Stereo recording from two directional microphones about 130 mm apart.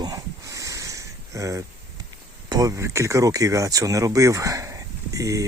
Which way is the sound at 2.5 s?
25° right (ahead or behind).